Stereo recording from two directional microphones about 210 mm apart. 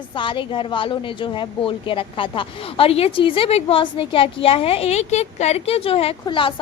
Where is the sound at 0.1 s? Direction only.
25° left (ahead or behind).